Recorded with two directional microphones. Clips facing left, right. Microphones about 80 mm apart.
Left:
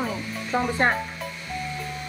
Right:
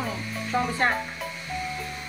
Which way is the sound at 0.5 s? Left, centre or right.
Left.